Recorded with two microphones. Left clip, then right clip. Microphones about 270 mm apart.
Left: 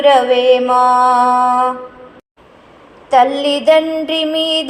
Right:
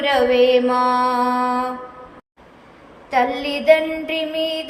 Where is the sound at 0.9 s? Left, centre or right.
Left.